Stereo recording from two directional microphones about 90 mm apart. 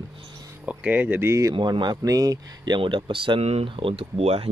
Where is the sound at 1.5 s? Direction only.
60° right (ahead or behind).